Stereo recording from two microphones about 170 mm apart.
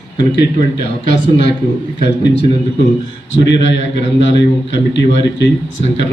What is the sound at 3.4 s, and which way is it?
A man's voice, 90° left.